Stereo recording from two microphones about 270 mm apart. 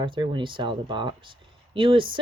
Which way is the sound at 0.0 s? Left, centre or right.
Centre.